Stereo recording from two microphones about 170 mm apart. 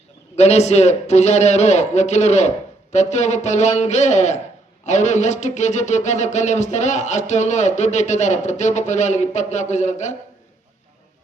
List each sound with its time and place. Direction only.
0.3 s a man's voice: 40° left (ahead or behind)